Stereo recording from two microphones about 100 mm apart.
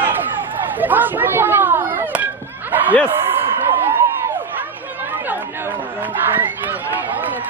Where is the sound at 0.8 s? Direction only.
20° right (ahead or behind).